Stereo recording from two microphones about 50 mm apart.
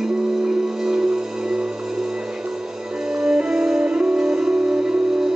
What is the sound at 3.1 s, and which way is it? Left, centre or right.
Music, centre.